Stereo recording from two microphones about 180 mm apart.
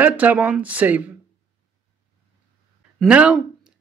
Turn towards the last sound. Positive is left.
turn(degrees=-5)  # may be behind; listen again after turning